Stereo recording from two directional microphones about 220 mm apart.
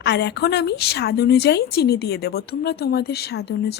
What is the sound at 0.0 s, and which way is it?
Speech, 50° left (ahead or behind).